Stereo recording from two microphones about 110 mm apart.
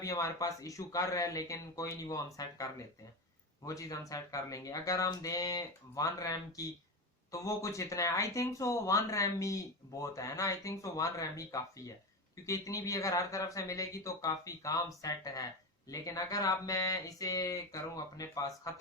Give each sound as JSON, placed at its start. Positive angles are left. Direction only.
{"t": 0.0, "sound": "speech", "side_deg": 30}